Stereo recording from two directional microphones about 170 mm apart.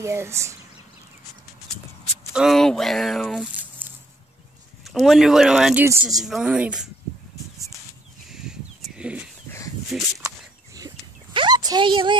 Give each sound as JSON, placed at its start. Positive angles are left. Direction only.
{"t": 0.0, "sound": "speech", "side_deg": -15}
{"t": 2.3, "sound": "speech", "side_deg": 0}
{"t": 4.8, "sound": "speech", "side_deg": 0}
{"t": 8.3, "sound": "a sound", "side_deg": 0}
{"t": 9.8, "sound": "speech", "side_deg": 0}
{"t": 10.2, "sound": "a sound", "side_deg": -20}
{"t": 11.3, "sound": "dog", "side_deg": -25}